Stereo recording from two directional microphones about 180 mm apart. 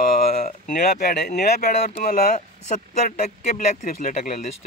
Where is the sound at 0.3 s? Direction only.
40° left (ahead or behind).